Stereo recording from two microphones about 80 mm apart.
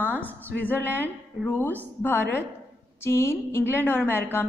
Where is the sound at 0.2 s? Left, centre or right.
Left.